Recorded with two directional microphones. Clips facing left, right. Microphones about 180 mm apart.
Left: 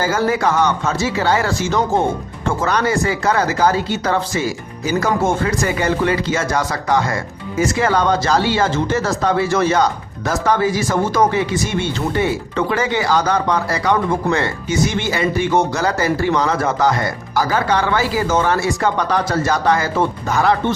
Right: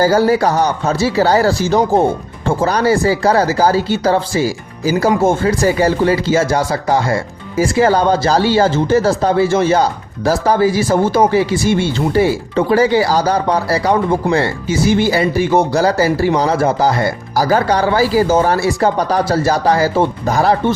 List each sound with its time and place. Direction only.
0.0 s speech: 35° right (ahead or behind)